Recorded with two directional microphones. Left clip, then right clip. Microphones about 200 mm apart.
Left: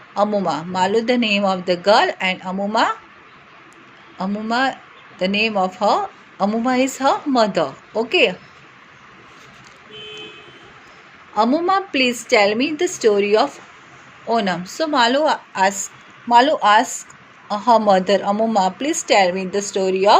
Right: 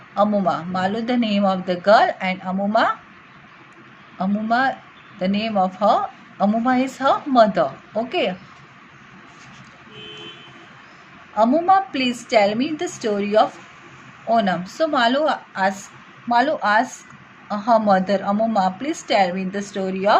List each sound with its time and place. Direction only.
0.1 s a woman's voice: 20° left (ahead or behind)
4.2 s a woman's voice: 20° left (ahead or behind)
11.3 s a woman's voice: 20° left (ahead or behind)